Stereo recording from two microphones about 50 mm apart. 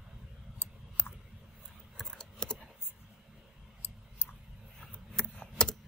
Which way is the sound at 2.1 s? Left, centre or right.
Centre.